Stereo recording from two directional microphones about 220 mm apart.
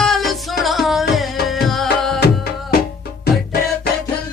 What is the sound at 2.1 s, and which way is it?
Music, 45° left (ahead or behind).